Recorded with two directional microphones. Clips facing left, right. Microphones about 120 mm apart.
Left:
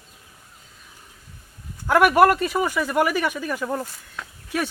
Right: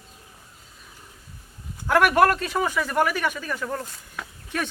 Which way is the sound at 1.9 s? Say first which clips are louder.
Left 3 dB; 10° left (ahead or behind).